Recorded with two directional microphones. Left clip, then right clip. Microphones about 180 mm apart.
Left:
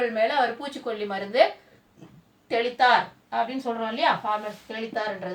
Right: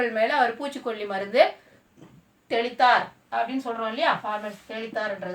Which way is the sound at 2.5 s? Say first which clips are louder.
Even; 30° right (ahead or behind).